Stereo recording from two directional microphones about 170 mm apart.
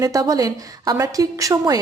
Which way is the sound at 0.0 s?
20° right (ahead or behind).